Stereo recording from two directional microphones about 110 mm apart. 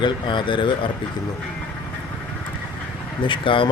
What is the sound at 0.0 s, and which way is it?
Speech, 45° left (ahead or behind).